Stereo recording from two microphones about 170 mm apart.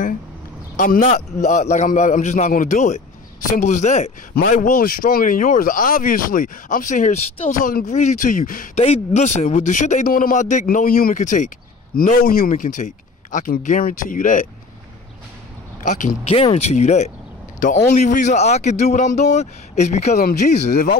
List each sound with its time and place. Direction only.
0.7 s speech: 50° left (ahead or behind)
4.4 s speech: 55° left (ahead or behind)
8.7 s speech: 35° left (ahead or behind)
15.8 s speech: 50° left (ahead or behind)
20.2 s speech: 60° left (ahead or behind)